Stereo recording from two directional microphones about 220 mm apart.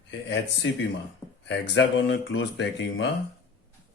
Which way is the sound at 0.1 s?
55° left (ahead or behind).